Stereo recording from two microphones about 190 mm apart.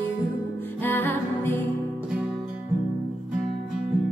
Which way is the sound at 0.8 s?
10° left (ahead or behind).